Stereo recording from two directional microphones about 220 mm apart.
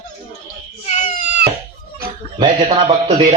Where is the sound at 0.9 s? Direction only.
35° left (ahead or behind).